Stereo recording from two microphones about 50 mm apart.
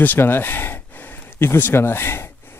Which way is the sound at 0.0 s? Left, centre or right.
Left.